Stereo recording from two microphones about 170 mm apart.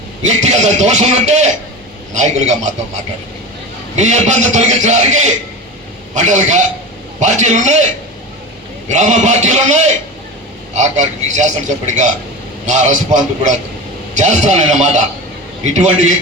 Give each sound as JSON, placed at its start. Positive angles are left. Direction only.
{"t": 0.2, "sound": "a man's voice", "side_deg": -45}
{"t": 3.9, "sound": "a man's voice", "side_deg": -45}
{"t": 8.9, "sound": "a man's voice", "side_deg": -45}